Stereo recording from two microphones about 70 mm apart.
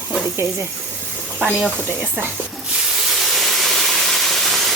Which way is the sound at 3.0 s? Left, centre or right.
Centre.